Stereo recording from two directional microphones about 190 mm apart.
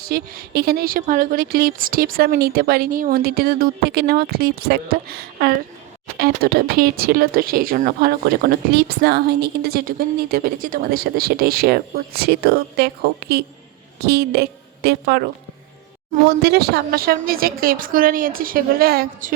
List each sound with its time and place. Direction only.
0.1 s a woman's voice: 50° right (ahead or behind)
16.4 s speech: 55° right (ahead or behind)